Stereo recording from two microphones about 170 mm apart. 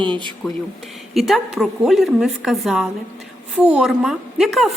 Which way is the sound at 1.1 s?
Centre (ahead or behind).